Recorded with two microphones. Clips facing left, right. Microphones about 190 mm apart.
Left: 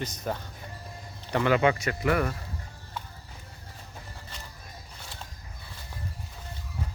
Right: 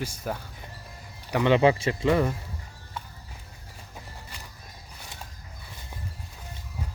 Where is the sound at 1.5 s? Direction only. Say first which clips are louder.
Right 4 dB; 30° right (ahead or behind).